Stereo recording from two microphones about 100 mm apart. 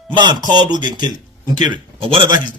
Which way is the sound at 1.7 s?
60° right (ahead or behind).